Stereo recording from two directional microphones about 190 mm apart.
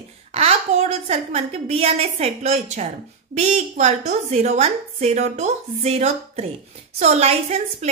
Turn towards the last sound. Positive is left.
turn(degrees=-35)  # may be behind; listen again after turning